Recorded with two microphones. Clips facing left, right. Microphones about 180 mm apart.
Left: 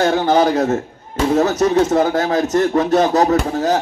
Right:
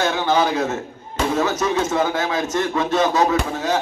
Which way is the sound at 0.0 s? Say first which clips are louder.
Left 5 dB; 40° left (ahead or behind).